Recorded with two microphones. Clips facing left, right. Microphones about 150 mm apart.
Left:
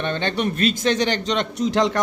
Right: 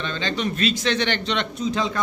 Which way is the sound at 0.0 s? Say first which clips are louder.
Left 3 dB; 60° left (ahead or behind).